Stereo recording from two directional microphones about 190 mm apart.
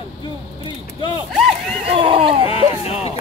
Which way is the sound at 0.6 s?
25° left (ahead or behind).